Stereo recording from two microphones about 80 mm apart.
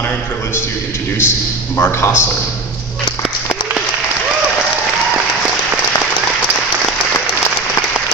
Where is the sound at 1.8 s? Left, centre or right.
Left.